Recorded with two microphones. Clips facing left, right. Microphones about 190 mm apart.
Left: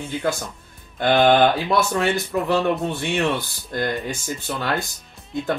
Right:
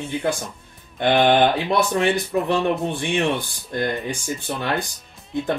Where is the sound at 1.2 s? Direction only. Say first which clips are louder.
Left 1 dB; 20° right (ahead or behind).